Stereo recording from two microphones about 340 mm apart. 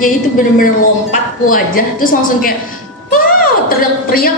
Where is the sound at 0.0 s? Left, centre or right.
Left.